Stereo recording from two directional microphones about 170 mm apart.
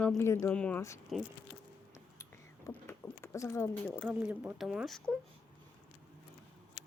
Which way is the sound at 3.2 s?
15° left (ahead or behind).